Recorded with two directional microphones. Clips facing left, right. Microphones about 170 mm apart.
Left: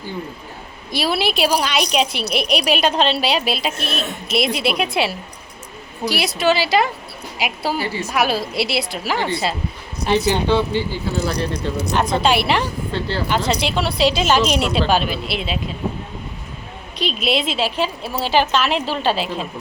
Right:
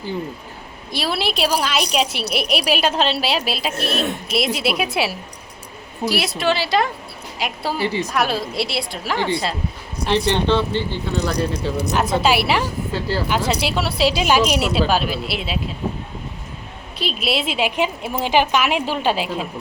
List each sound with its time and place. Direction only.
0.9 s speech: centre (ahead or behind)
7.8 s a woman's voice: 20° right (ahead or behind)
8.0 s speech: 5° left (ahead or behind)
17.0 s a woman's voice: 5° right (ahead or behind)